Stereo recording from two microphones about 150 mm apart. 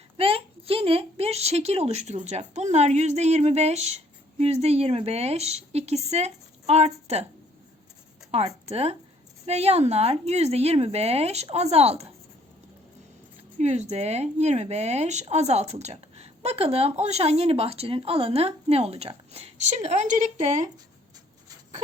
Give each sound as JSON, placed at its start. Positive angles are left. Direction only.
{"t": 0.2, "sound": "speech", "side_deg": -40}
{"t": 8.3, "sound": "speech", "side_deg": -45}
{"t": 13.6, "sound": "speech", "side_deg": -50}